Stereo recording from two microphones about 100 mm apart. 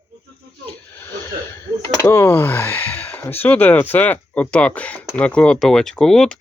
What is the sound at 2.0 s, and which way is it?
Speech, 30° left (ahead or behind).